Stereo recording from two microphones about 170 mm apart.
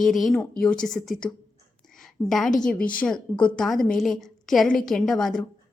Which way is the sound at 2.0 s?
Centre (ahead or behind).